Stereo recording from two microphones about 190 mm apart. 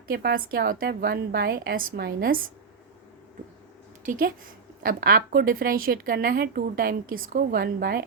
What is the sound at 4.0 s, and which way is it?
A woman's voice, 45° right (ahead or behind).